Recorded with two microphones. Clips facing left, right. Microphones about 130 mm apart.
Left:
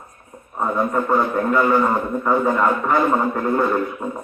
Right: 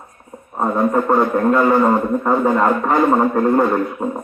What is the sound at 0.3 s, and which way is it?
A man's voice, 35° right (ahead or behind).